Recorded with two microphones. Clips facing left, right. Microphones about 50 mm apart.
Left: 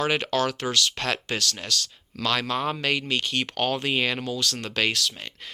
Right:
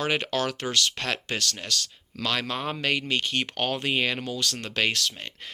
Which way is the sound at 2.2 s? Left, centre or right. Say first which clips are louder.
Left 3 dB; centre.